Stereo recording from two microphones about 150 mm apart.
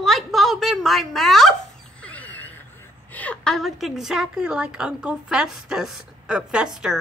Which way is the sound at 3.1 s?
10° left (ahead or behind).